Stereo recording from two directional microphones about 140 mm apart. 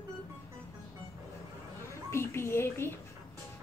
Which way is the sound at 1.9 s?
20° left (ahead or behind).